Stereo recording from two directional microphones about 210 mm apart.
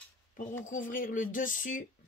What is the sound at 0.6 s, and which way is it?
Speech, 40° left (ahead or behind).